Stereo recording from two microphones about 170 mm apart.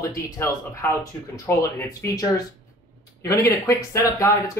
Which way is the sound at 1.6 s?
20° left (ahead or behind).